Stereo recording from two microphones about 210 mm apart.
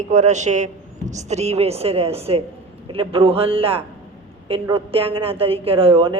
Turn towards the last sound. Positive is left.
turn(degrees=-25)  # may be behind; listen again after turning